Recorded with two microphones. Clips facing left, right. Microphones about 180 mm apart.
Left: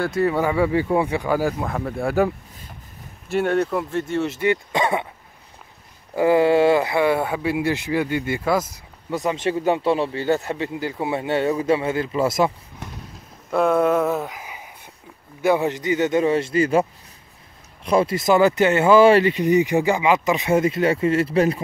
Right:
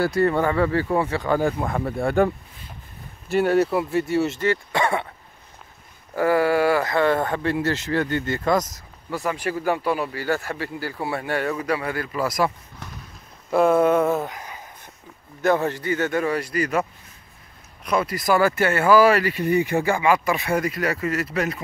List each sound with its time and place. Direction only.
0.0 s speech: centre (ahead or behind)
4.4 s speech: 15° left (ahead or behind)
6.1 s speech: 20° left (ahead or behind)
9.1 s speech: 20° left (ahead or behind)
13.5 s speech: centre (ahead or behind); by 16.8 s 25° left (ahead or behind)
17.8 s speech: 25° left (ahead or behind)